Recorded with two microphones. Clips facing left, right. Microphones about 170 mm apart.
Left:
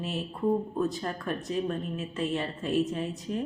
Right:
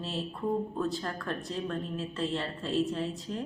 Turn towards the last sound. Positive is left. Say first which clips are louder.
# left 2 dB
turn(degrees=15)  # may be behind; listen again after turning